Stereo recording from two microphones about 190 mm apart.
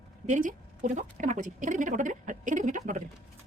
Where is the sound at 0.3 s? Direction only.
40° right (ahead or behind).